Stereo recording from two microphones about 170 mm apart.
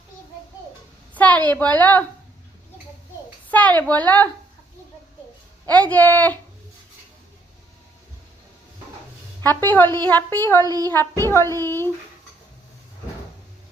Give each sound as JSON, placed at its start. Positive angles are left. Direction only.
{"t": 1.1, "sound": "a sound", "side_deg": 10}
{"t": 1.5, "sound": "speech", "side_deg": 10}
{"t": 3.5, "sound": "a woman's voice", "side_deg": 10}
{"t": 5.6, "sound": "speech", "side_deg": 10}
{"t": 9.4, "sound": "speech", "side_deg": 10}
{"t": 10.6, "sound": "a child's voice", "side_deg": -20}
{"t": 10.9, "sound": "speech", "side_deg": 10}